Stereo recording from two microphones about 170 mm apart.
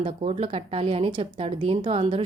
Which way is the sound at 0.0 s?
35° right (ahead or behind).